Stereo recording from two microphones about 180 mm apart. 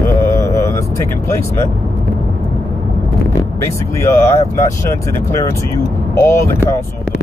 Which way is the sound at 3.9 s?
15° left (ahead or behind).